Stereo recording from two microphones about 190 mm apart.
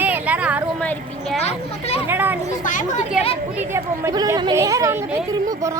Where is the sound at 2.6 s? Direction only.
40° left (ahead or behind).